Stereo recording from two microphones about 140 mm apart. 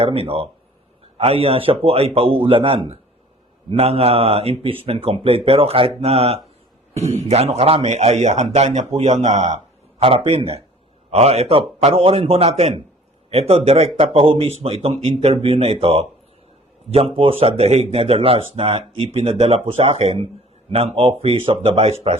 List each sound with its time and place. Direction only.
0.0 s a man's voice: 45° right (ahead or behind)
10.0 s a man's voice: 40° right (ahead or behind)